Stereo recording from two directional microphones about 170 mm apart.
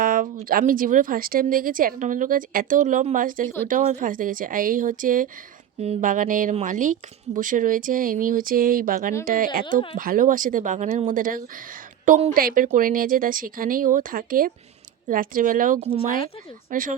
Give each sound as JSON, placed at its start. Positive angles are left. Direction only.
{"t": 0.0, "sound": "speech", "side_deg": -55}